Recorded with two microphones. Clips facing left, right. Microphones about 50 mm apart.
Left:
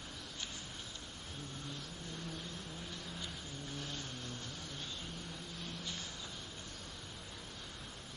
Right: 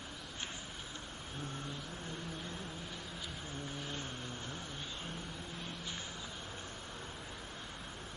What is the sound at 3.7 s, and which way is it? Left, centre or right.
Vehicle, right.